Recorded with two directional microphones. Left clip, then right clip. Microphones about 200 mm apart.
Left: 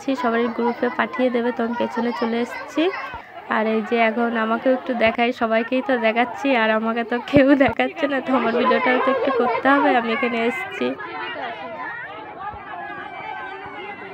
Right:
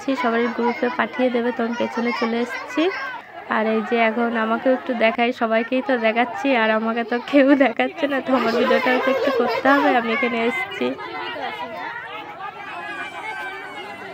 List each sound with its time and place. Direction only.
0.0 s a woman's voice: centre (ahead or behind)